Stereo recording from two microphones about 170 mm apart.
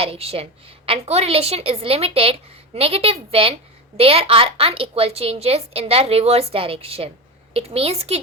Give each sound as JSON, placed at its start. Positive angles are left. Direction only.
{"t": 0.0, "sound": "a woman's voice", "side_deg": -35}